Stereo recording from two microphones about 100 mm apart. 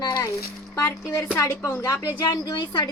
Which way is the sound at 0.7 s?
25° left (ahead or behind).